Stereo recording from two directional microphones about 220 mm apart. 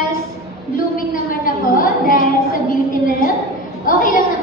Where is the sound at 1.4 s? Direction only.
40° left (ahead or behind).